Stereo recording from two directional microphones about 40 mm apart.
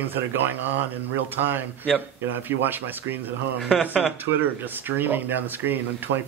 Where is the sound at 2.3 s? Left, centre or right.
Right.